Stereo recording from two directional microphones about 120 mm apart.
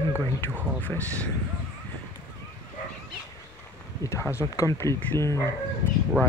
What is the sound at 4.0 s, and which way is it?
Speech, 25° left (ahead or behind).